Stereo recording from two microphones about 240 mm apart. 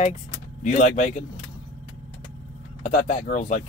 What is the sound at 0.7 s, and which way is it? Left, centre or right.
Speech, left.